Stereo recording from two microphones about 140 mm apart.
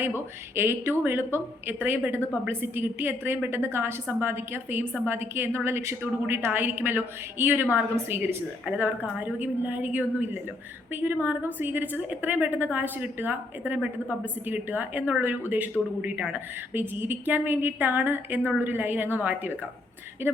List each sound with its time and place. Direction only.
0.5 s a woman's voice: 15° right (ahead or behind)